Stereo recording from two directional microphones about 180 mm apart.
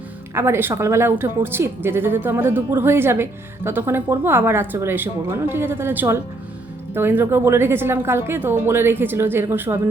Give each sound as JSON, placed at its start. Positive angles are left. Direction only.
{"t": 0.3, "sound": "a woman's voice", "side_deg": -15}